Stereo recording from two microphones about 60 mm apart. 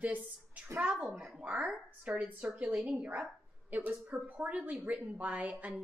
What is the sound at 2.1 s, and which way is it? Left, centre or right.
A woman's voice, right.